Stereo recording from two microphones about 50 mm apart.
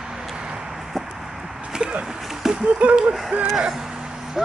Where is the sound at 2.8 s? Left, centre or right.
Right.